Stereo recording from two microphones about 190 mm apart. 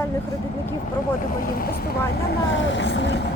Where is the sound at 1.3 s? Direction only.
50° left (ahead or behind).